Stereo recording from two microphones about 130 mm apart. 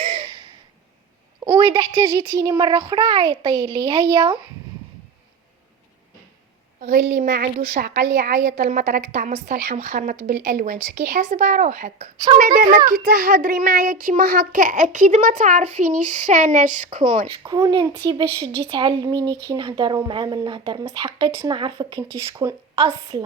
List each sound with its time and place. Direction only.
0.0 s a sound: 50° right (ahead or behind)
1.5 s a woman's voice: 40° right (ahead or behind)
2.0 s a child's voice: 25° right (ahead or behind)
6.8 s a child's voice: 85° right
11.2 s speech: 70° right (ahead or behind)
12.2 s a child's voice: 35° right (ahead or behind)
12.5 s a child's voice: 90° right; by 17.2 s 65° right (ahead or behind)
17.4 s a child's voice: 30° right (ahead or behind)
22.4 s speech: 25° right (ahead or behind)